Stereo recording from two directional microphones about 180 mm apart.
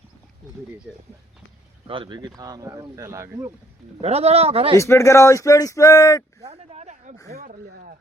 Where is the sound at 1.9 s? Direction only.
25° right (ahead or behind).